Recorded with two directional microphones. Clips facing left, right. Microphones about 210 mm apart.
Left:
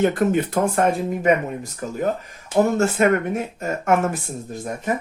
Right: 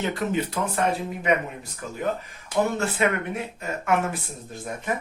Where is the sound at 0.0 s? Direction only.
50° left (ahead or behind).